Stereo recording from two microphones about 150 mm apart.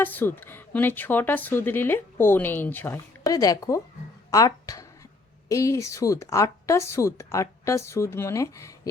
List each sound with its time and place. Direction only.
0.0 s speech: 15° left (ahead or behind)
4.3 s music: 25° left (ahead or behind)
5.5 s speech: 20° left (ahead or behind)